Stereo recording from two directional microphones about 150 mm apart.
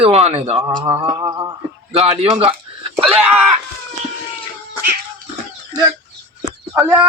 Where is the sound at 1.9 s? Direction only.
40° right (ahead or behind).